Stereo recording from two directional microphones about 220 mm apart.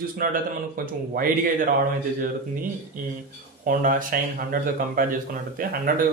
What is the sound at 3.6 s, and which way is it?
Speech, 40° right (ahead or behind).